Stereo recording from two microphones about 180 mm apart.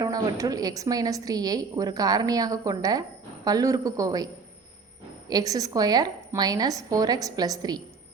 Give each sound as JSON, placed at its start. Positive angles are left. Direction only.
{"t": 0.0, "sound": "a woman's voice", "side_deg": -20}
{"t": 5.3, "sound": "a woman's voice", "side_deg": -20}